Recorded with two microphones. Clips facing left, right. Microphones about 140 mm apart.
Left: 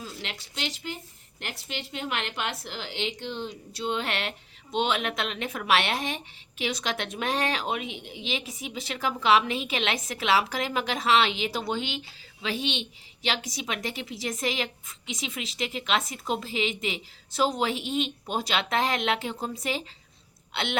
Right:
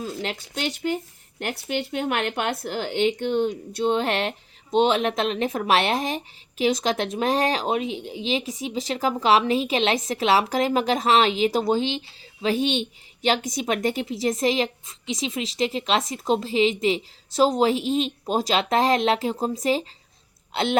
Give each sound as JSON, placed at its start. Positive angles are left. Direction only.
{"t": 0.0, "sound": "speech", "side_deg": -45}
{"t": 3.8, "sound": "speech", "side_deg": -40}